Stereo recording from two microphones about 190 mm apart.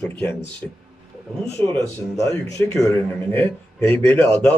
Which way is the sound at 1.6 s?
15° left (ahead or behind).